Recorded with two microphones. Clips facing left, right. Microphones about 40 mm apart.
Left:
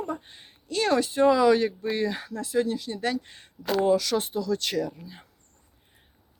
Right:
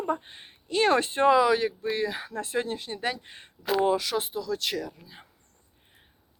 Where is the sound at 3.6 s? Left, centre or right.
Centre.